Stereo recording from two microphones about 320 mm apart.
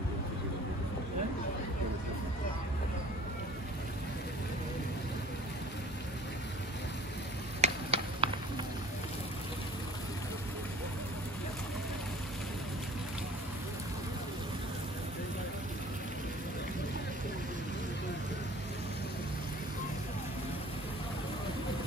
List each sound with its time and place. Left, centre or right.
7.6 s stir: centre